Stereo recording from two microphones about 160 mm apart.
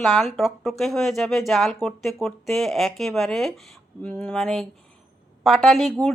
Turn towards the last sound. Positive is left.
turn(degrees=0)  # may be behind; listen again after turning